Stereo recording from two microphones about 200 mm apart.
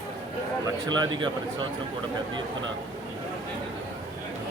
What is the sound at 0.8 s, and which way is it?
Speech, 20° right (ahead or behind).